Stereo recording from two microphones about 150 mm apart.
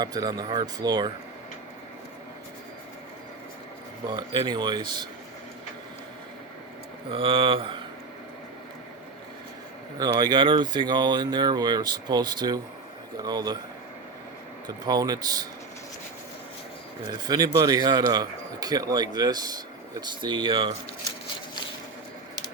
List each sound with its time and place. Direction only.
0.0 s a man's voice: 25° right (ahead or behind)
4.1 s a man's voice: 30° right (ahead or behind)
7.1 s speech: 35° right (ahead or behind)
10.0 s a man's voice: 25° right (ahead or behind)
14.8 s a man's voice: 25° right (ahead or behind)
17.1 s a man's voice: 25° right (ahead or behind)